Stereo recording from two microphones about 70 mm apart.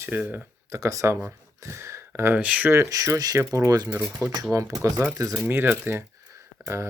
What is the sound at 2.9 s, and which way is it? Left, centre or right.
Speech, right.